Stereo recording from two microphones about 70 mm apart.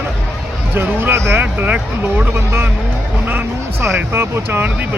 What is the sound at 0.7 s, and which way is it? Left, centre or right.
Speech, right.